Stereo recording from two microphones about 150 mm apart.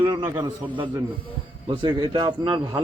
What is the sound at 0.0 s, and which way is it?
A man's voice, 25° right (ahead or behind).